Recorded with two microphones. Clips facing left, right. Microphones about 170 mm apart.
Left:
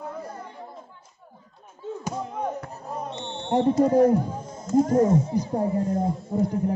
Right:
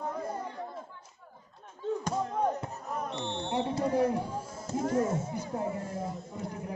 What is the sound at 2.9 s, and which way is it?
Basketball bounce, 30° left (ahead or behind).